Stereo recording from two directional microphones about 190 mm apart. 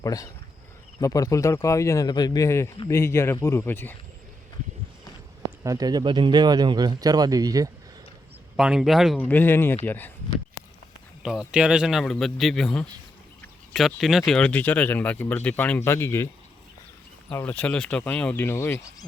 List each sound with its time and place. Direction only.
0.0 s speech: 20° left (ahead or behind)
5.6 s speech: 20° right (ahead or behind)
8.5 s a man's voice: 5° right (ahead or behind)
9.2 s speech: 10° left (ahead or behind)
11.2 s a man's voice: centre (ahead or behind)